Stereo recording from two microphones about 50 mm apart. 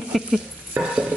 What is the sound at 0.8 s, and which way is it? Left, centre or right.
Speech, right.